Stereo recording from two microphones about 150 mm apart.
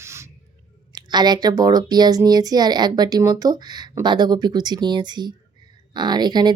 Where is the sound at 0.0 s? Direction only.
20° right (ahead or behind).